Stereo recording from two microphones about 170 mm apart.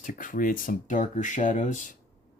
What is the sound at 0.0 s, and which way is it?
Speech, 50° left (ahead or behind).